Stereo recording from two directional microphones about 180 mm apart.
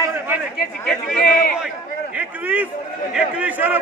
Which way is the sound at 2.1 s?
10° right (ahead or behind).